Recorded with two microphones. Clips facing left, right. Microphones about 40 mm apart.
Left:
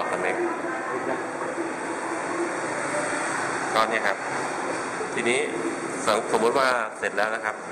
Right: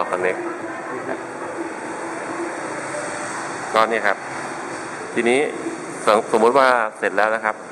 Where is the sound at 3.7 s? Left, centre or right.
Right.